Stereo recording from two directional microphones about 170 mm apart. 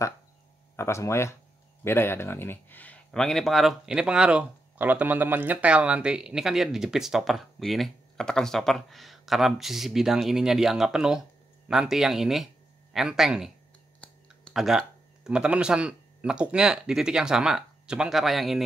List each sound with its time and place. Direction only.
0.7 s speech: 15° left (ahead or behind); by 18.6 s centre (ahead or behind)